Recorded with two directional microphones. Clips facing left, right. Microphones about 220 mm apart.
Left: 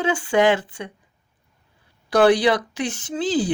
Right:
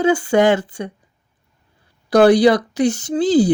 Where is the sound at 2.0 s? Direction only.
40° right (ahead or behind).